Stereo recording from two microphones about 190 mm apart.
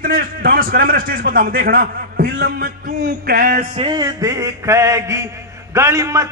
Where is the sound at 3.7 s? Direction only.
25° right (ahead or behind).